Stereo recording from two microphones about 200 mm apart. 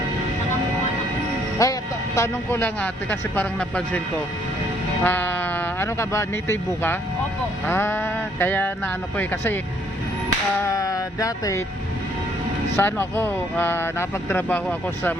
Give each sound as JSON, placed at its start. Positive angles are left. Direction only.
{"t": 1.6, "sound": "speech", "side_deg": 15}
{"t": 5.0, "sound": "speech", "side_deg": 10}
{"t": 10.7, "sound": "speech", "side_deg": 15}
{"t": 12.7, "sound": "speech", "side_deg": 10}